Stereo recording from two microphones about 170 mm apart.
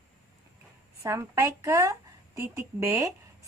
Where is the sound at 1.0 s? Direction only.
20° right (ahead or behind).